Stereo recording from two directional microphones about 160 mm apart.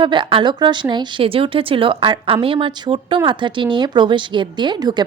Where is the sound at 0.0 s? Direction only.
30° right (ahead or behind).